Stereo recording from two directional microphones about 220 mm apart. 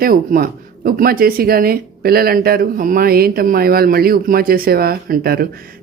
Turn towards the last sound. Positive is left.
turn(degrees=-45)  # may be behind; listen again after turning